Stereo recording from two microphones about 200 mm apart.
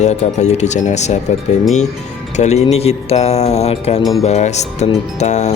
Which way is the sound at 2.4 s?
35° left (ahead or behind).